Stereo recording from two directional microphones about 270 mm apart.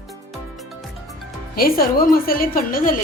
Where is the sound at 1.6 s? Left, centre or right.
Left.